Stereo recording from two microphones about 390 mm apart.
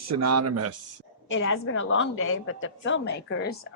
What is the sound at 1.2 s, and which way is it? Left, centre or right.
A woman's voice, left.